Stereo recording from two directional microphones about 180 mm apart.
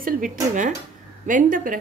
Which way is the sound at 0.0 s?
45° right (ahead or behind).